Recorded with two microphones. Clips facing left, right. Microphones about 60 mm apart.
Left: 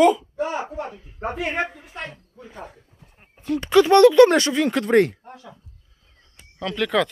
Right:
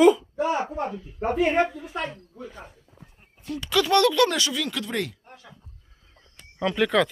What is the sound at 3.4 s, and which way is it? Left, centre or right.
Speech, left.